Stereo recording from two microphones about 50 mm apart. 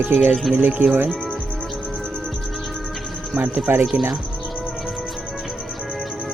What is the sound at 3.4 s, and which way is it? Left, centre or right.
Speech, right.